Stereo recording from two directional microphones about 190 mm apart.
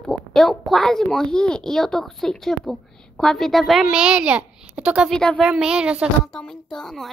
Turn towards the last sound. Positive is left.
turn(degrees=0)  # may be behind; listen again after turning